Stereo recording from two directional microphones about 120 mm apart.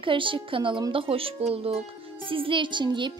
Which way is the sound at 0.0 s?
45° right (ahead or behind).